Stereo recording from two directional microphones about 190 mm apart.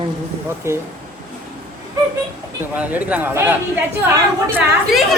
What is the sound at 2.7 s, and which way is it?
Speech, 10° right (ahead or behind).